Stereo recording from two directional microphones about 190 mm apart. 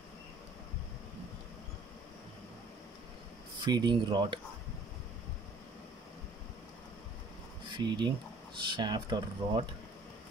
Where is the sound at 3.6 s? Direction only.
25° right (ahead or behind).